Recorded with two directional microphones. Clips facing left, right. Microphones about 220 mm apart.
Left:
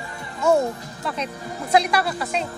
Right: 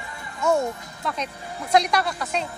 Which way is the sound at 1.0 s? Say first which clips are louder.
Left 2 dB; 5° left (ahead or behind).